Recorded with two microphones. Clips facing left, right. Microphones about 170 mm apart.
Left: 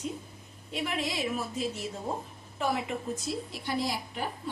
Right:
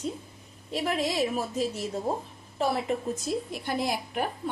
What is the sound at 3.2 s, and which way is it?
A woman's voice, 55° right (ahead or behind).